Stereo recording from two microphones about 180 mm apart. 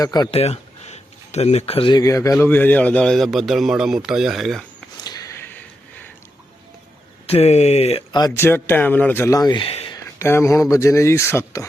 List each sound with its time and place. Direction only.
0.0 s speech: 20° left (ahead or behind)
0.3 s speech: 35° left (ahead or behind); by 4.6 s centre (ahead or behind)
5.0 s a sound: 20° left (ahead or behind)
7.3 s speech: 35° left (ahead or behind)
8.1 s speech: 20° left (ahead or behind)
10.2 s speech: 15° left (ahead or behind)